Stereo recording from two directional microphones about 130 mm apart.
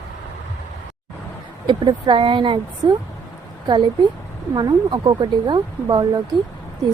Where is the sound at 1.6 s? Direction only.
40° right (ahead or behind).